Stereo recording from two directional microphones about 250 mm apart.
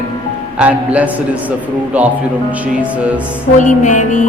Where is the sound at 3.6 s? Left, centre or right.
Left.